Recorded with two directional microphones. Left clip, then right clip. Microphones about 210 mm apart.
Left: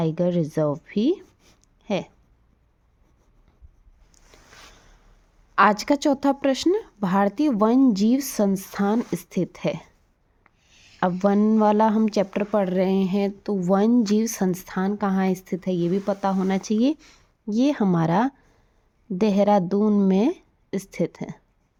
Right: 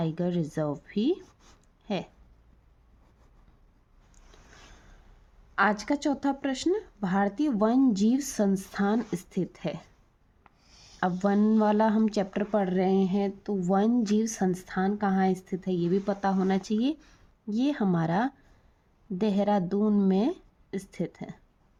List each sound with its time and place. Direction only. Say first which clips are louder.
0.0 s speech: left 8 dB; 30° left (ahead or behind)
5.5 s speech: left 8 dB; 40° left (ahead or behind)
10.4 s a sound: left 2 dB; 5° right (ahead or behind)
11.2 s speech: left 6 dB; 30° left (ahead or behind)